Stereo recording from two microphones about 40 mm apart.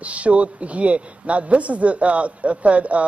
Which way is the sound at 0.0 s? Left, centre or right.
Right.